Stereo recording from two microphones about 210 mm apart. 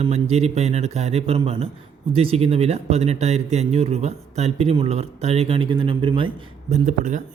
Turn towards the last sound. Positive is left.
turn(degrees=-35)  # may be behind; listen again after turning